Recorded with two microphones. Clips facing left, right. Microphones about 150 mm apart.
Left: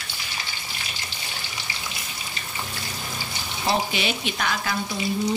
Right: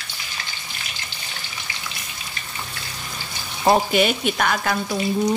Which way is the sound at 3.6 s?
50° right (ahead or behind).